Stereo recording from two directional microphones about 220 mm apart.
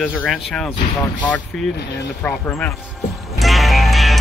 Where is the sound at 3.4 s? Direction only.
Centre (ahead or behind).